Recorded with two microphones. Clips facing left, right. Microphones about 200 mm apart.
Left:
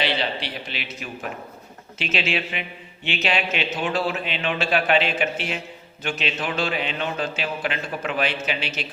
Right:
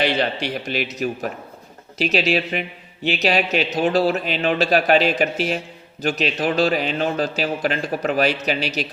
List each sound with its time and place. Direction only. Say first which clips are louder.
0.0 s a man's voice: right 5 dB; 45° right (ahead or behind)